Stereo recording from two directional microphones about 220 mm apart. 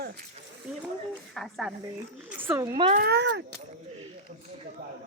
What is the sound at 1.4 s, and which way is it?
Speech, centre (ahead or behind).